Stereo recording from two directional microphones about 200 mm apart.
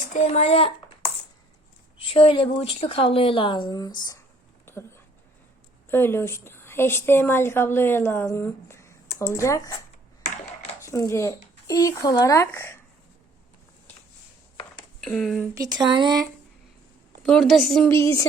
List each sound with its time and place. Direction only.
0.1 s speech: 35° left (ahead or behind)
2.0 s a woman's voice: 30° left (ahead or behind)
4.6 s a sound: 10° left (ahead or behind)
5.9 s a woman's voice: 10° left (ahead or behind)
15.0 s a woman's voice: centre (ahead or behind)
15.5 s speech: 20° right (ahead or behind)
17.2 s a woman's voice: centre (ahead or behind)
17.9 s a woman's voice: 15° left (ahead or behind)